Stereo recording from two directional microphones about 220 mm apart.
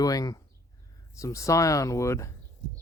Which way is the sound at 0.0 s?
15° left (ahead or behind).